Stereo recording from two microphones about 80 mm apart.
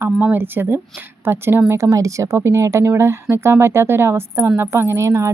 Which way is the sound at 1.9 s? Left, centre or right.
Right.